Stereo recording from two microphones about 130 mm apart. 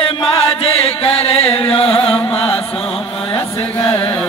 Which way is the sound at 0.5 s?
45° left (ahead or behind).